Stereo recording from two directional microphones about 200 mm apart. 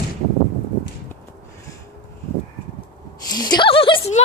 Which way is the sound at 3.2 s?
20° left (ahead or behind).